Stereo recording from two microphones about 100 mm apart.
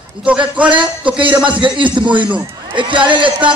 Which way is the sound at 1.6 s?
55° right (ahead or behind).